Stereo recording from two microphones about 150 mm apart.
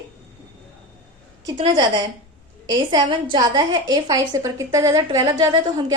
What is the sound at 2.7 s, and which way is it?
A woman's voice, 30° right (ahead or behind).